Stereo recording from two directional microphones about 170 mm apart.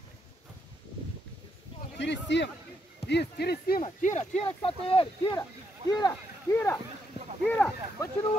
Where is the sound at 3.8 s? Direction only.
45° left (ahead or behind).